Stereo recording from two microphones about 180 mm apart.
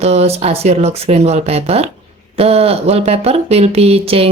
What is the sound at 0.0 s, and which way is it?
Speech, 35° right (ahead or behind).